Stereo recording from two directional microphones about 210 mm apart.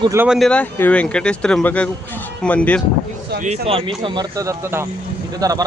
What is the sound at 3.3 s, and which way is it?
Speech, 35° right (ahead or behind).